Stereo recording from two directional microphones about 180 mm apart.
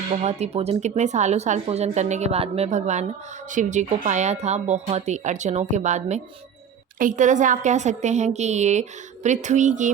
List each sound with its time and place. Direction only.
0.1 s a woman's voice: 35° right (ahead or behind)